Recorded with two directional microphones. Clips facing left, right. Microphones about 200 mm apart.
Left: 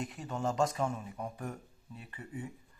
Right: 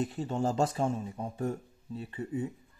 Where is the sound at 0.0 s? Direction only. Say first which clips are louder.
Right 5 dB; 30° right (ahead or behind).